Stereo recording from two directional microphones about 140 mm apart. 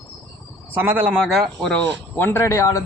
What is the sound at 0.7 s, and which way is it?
Speech, 15° right (ahead or behind).